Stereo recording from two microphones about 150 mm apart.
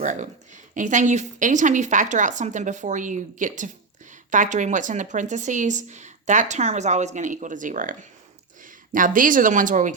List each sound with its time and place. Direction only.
0.0 s speech: 55° right (ahead or behind)